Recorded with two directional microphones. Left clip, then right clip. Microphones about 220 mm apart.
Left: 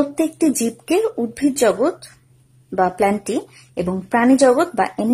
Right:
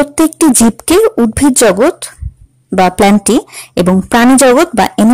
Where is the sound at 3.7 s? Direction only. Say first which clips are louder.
Right 9 dB; 40° right (ahead or behind).